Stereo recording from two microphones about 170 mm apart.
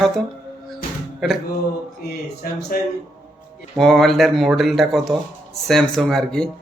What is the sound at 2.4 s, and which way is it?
Speech, 70° left (ahead or behind).